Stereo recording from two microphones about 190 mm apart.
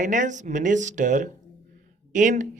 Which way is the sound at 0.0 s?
40° right (ahead or behind).